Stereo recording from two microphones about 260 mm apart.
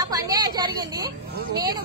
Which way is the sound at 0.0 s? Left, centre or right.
Centre.